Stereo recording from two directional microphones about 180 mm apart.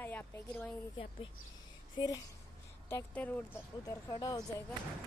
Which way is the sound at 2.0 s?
20° left (ahead or behind).